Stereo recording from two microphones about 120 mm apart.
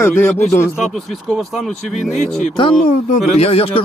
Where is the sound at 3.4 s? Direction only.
55° left (ahead or behind).